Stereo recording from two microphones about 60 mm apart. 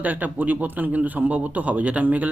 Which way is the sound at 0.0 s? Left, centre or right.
Right.